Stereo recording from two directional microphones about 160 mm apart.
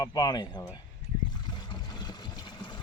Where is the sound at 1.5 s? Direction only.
25° left (ahead or behind).